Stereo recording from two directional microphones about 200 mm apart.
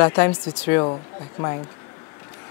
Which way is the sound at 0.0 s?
15° left (ahead or behind).